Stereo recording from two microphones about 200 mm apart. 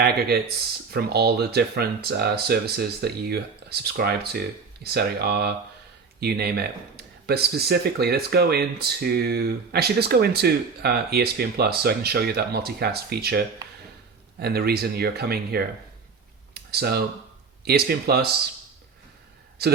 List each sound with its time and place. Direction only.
0.0 s speech: 50° right (ahead or behind)
16.6 s a sound: 50° right (ahead or behind)
17.7 s speech: 50° right (ahead or behind)
19.6 s speech: 50° right (ahead or behind)